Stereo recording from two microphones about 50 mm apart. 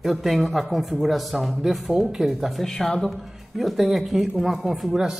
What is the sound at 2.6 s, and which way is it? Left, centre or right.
Speech, centre.